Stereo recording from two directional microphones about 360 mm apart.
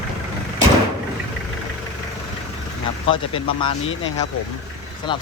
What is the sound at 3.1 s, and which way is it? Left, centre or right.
Speech, centre.